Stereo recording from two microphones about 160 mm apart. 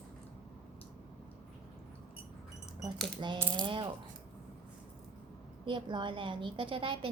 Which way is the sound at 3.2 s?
30° right (ahead or behind).